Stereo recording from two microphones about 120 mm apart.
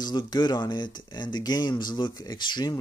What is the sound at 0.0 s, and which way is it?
Speech, 35° left (ahead or behind).